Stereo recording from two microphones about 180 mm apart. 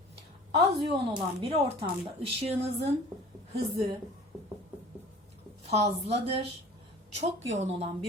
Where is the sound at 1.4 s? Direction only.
30° right (ahead or behind).